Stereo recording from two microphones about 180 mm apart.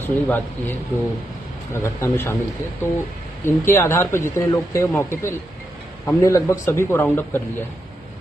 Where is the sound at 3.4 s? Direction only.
15° left (ahead or behind).